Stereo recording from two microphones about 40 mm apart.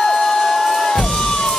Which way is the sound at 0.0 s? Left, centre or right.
Centre.